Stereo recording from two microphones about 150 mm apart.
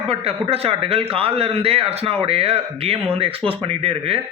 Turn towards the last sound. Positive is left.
turn(degrees=-40)  # may be behind; listen again after turning